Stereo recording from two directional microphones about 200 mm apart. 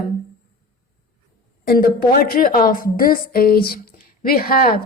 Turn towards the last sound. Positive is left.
turn(degrees=45)  # may be behind; listen again after turning